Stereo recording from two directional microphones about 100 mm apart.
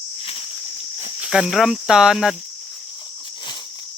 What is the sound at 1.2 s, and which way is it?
Speech, 10° right (ahead or behind).